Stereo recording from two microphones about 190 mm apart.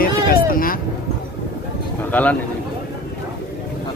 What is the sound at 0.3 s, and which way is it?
Vehicle, 50° left (ahead or behind).